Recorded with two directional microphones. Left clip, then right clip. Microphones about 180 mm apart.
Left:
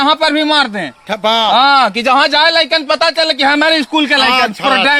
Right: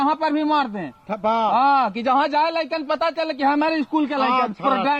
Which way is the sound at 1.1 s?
Centre (ahead or behind).